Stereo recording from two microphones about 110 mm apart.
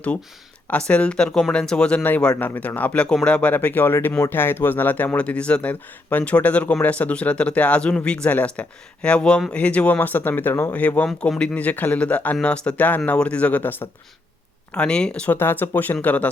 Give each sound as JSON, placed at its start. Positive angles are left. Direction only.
{"t": 0.7, "sound": "speech", "side_deg": 10}
{"t": 15.4, "sound": "speech", "side_deg": 20}